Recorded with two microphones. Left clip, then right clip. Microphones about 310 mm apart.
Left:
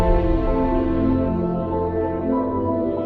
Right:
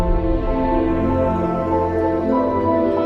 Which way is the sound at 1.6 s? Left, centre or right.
Right.